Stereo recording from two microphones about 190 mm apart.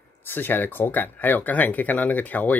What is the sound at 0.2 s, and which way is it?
Speech, 10° left (ahead or behind).